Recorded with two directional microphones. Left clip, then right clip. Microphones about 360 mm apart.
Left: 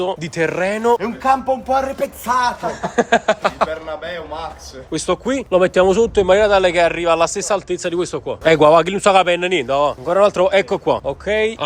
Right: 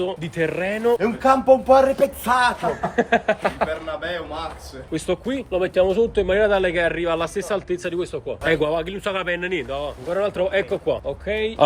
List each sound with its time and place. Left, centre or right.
0.0 s speech: centre
2.8 s speech: centre